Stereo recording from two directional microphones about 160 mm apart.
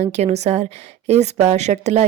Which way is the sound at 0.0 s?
45° right (ahead or behind).